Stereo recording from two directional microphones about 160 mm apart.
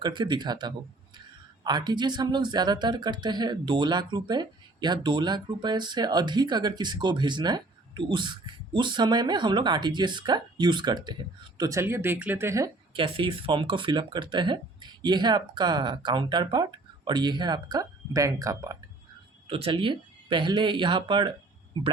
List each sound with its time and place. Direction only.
0.0 s speech: 30° right (ahead or behind)
12.9 s speech: 30° right (ahead or behind)
19.5 s speech: 35° right (ahead or behind)